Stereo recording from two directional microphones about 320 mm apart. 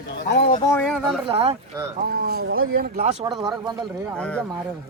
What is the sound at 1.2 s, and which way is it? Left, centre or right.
Speech, centre.